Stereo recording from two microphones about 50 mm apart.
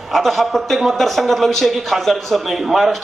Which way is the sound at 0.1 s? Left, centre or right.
Centre.